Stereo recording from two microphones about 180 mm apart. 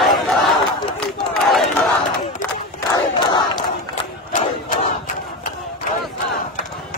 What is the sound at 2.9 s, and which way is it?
Crowd, 25° left (ahead or behind).